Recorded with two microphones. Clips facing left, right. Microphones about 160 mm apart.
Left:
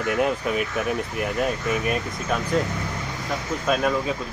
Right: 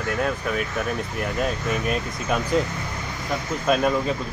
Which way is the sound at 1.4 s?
5° left (ahead or behind).